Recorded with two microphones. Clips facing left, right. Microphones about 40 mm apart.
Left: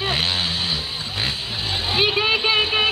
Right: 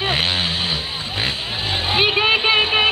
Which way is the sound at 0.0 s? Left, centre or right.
Centre.